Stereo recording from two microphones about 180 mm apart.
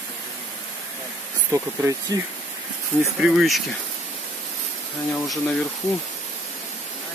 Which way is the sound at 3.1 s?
Centre (ahead or behind).